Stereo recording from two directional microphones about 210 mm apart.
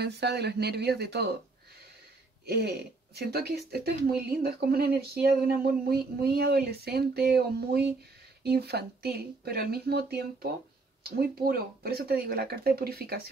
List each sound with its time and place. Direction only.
0.0 s speech: 55° right (ahead or behind)
2.4 s speech: 50° right (ahead or behind)